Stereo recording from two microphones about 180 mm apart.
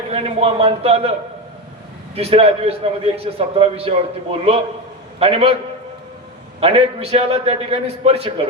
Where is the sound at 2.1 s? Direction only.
35° right (ahead or behind).